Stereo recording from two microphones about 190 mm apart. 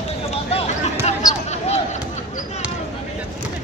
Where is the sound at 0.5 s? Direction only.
35° left (ahead or behind).